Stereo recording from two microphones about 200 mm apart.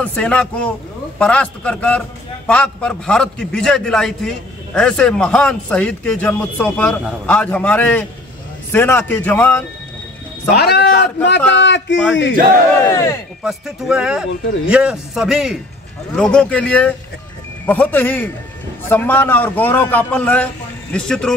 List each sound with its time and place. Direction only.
0.0 s a man's voice: 5° left (ahead or behind)
10.5 s a man's voice: 55° left (ahead or behind)
12.9 s a man's voice: 15° left (ahead or behind)
13.4 s a man's voice: centre (ahead or behind)